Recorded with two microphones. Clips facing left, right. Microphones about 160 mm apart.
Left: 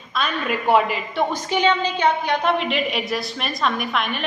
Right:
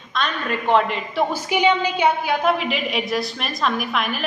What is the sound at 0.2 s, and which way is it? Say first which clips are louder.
A woman's voice: left 1 dB; 5° left (ahead or behind).